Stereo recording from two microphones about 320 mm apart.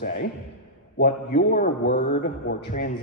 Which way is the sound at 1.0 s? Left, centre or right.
Left.